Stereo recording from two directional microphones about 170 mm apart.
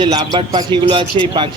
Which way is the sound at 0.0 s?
25° right (ahead or behind).